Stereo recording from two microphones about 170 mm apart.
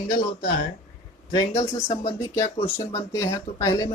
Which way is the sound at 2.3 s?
20° left (ahead or behind).